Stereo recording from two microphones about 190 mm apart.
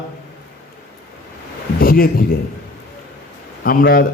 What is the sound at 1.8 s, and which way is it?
Speech, 50° left (ahead or behind).